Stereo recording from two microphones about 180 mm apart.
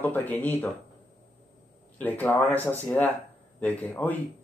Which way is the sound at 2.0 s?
10° left (ahead or behind).